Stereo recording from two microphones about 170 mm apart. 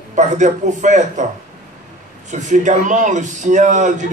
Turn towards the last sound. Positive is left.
turn(degrees=-45)  # may be behind; listen again after turning